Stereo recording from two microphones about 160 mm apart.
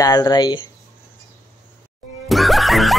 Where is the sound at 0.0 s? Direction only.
25° left (ahead or behind).